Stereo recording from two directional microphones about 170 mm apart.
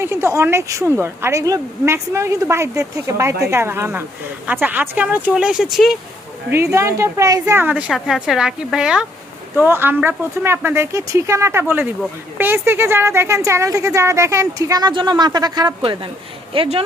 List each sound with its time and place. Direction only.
0.0 s speech: 15° right (ahead or behind)
6.5 s speech: 15° right (ahead or behind); by 16.8 s 35° right (ahead or behind)